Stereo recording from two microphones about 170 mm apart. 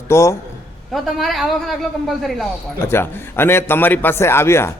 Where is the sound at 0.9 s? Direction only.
Centre (ahead or behind).